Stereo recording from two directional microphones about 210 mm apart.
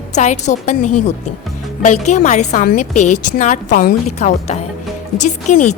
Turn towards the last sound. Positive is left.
turn(degrees=35)  # may be behind; listen again after turning